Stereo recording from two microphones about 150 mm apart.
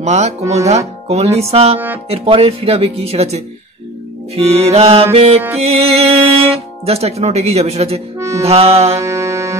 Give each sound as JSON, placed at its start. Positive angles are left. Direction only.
{"t": 0.0, "sound": "speech", "side_deg": -45}
{"t": 8.9, "sound": "music", "side_deg": -20}